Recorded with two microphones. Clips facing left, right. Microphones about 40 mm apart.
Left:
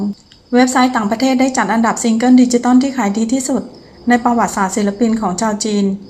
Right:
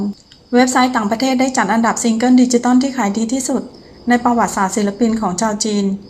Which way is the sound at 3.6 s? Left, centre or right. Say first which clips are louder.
Left 2 dB; centre.